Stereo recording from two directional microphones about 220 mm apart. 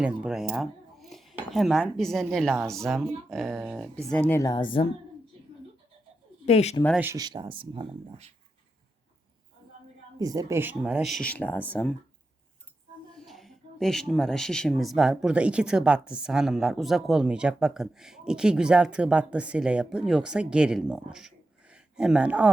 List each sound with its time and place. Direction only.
0.0 s a woman's voice: 5° right (ahead or behind); by 4.9 s 20° left (ahead or behind)
6.4 s speech: 30° left (ahead or behind)
7.0 s speech: 15° right (ahead or behind)
10.2 s speech: 15° right (ahead or behind)
11.3 s speech: 5° left (ahead or behind)
13.1 s a woman's voice: centre (ahead or behind)